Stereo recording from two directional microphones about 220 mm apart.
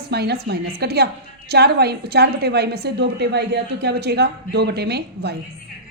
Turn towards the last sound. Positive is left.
turn(degrees=-50)  # may be behind; listen again after turning